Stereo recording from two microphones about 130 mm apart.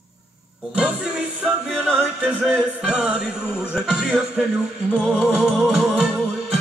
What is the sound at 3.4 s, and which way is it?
Speech, 15° left (ahead or behind).